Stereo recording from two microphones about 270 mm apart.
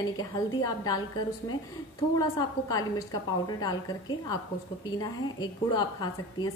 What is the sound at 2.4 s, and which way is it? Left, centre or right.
A woman's voice, centre.